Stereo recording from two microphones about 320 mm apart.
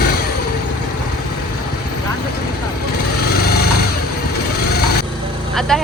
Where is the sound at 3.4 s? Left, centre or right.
Left.